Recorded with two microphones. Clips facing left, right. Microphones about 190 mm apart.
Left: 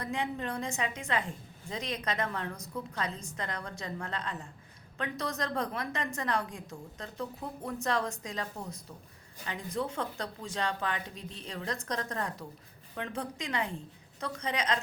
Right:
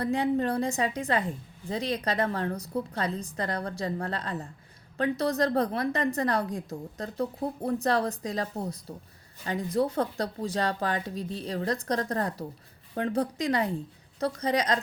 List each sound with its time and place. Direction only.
0.0 s a woman's voice: 35° right (ahead or behind)